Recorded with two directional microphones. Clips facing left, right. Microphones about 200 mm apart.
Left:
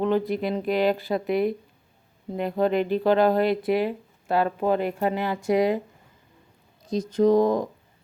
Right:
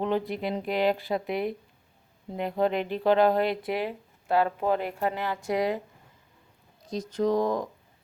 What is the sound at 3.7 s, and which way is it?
Speech, 10° right (ahead or behind).